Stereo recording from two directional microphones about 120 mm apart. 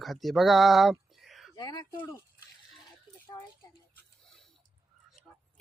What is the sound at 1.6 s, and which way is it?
Speech, 35° left (ahead or behind).